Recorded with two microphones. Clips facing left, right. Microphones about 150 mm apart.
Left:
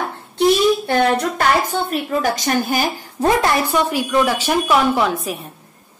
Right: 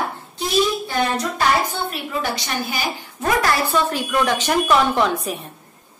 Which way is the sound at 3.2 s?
25° left (ahead or behind).